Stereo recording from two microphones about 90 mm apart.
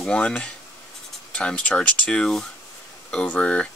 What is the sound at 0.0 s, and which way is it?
Speech, 10° left (ahead or behind).